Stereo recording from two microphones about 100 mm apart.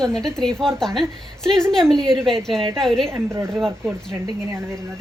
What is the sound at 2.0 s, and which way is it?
Speech, 55° right (ahead or behind).